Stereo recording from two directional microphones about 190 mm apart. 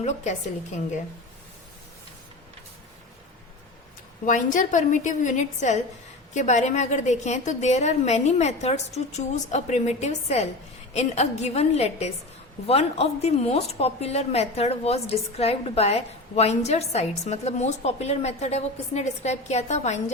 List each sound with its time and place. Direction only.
4.3 s a woman's voice: 40° left (ahead or behind)